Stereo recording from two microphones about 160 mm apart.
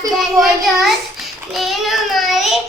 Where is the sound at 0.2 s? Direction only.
Centre (ahead or behind).